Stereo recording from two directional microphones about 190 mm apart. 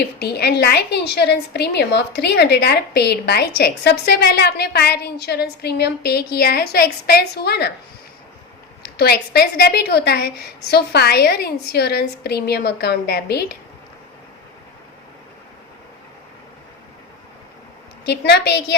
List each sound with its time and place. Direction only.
0.2 s a woman's voice: 55° left (ahead or behind)
8.8 s a woman's voice: 60° left (ahead or behind)
18.0 s a woman's voice: 60° left (ahead or behind)